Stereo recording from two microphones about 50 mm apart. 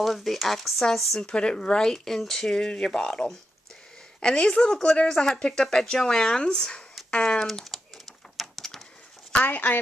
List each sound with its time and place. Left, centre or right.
0.0 s speech: centre
1.2 s speech: centre
7.1 s typing: centre
8.4 s a sound: centre
9.3 s speech: left